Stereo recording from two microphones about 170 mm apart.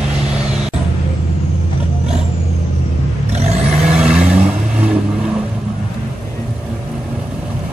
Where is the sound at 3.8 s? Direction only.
5° right (ahead or behind).